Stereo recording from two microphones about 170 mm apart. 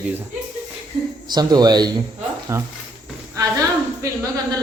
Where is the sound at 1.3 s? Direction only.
25° right (ahead or behind).